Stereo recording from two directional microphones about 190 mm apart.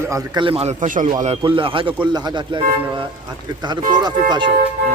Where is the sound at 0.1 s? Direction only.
20° right (ahead or behind); by 1.1 s 40° right (ahead or behind).